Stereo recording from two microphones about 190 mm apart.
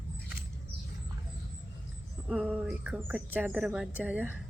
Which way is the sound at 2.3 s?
5° right (ahead or behind).